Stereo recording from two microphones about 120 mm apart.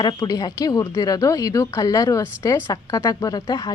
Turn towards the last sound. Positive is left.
turn(degrees=30)  # may be behind; listen again after turning